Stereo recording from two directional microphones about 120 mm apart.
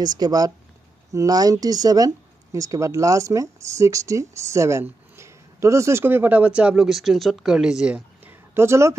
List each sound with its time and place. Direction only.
0.0 s speech: 35° right (ahead or behind)